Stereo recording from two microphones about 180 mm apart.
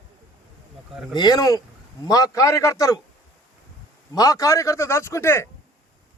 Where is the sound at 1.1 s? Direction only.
20° left (ahead or behind).